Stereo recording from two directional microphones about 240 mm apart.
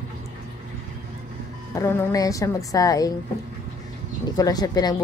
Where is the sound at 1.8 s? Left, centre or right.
Centre.